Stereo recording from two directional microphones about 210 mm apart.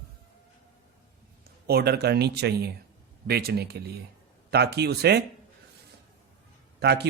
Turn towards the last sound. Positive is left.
turn(degrees=-50)  # may be behind; listen again after turning